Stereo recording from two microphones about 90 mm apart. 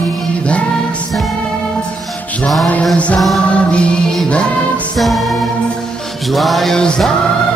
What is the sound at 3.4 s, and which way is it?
Music, 10° left (ahead or behind).